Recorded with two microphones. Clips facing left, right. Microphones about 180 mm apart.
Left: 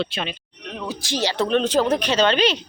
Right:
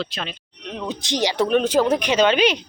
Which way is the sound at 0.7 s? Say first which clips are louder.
Right 2 dB; 20° right (ahead or behind).